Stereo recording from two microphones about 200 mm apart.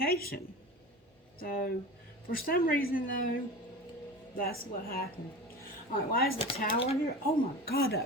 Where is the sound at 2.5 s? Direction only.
45° left (ahead or behind).